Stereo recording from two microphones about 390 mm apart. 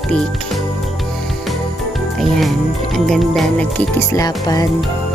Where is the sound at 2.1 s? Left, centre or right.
Centre.